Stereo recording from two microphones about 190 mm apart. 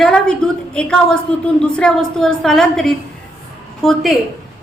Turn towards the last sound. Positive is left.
turn(degrees=0)  # may be behind; listen again after turning